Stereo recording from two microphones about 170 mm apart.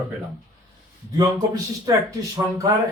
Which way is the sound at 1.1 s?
20° right (ahead or behind).